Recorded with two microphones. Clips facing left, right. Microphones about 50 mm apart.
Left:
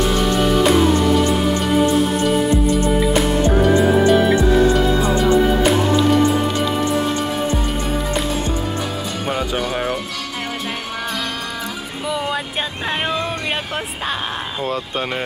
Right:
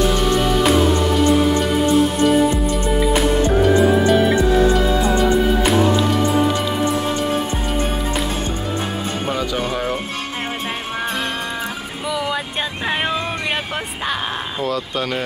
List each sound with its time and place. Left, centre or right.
0.5 s music: centre
12.1 s music: centre